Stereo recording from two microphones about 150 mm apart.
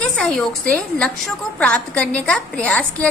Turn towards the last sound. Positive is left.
turn(degrees=10)  # may be behind; listen again after turning